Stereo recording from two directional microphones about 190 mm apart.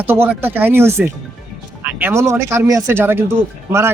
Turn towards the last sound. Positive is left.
turn(degrees=-15)  # may be behind; listen again after turning